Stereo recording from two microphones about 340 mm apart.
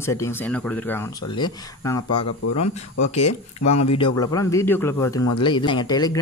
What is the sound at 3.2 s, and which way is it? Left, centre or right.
Speech, left.